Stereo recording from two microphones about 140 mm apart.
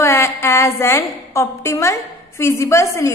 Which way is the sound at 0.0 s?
20° left (ahead or behind).